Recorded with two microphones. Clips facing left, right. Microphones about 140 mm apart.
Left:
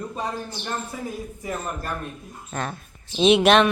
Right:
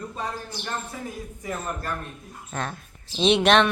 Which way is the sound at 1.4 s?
15° left (ahead or behind).